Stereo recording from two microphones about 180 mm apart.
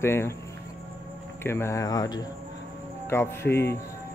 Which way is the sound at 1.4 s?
15° left (ahead or behind).